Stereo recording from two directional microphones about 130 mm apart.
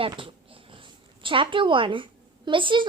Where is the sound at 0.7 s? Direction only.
40° right (ahead or behind).